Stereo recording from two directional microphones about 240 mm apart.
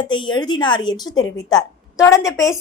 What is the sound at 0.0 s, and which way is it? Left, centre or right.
A woman's voice, centre.